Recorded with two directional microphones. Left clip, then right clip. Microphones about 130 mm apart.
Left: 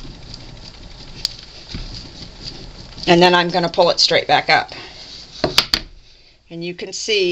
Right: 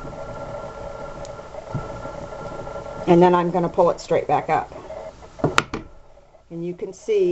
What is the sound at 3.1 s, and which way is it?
Speech, 20° left (ahead or behind).